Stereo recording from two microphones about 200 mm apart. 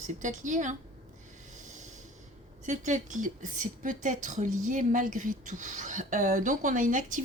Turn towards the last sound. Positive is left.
turn(degrees=-40)  # may be behind; listen again after turning